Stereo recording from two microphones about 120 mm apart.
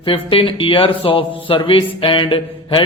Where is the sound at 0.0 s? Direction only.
45° left (ahead or behind).